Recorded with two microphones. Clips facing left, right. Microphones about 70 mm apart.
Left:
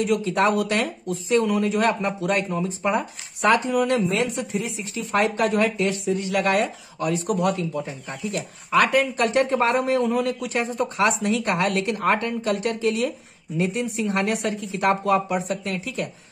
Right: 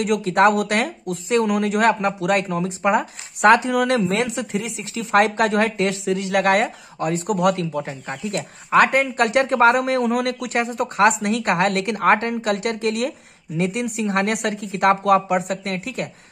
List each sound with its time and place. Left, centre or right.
0.0 s speech: right
6.3 s speech: right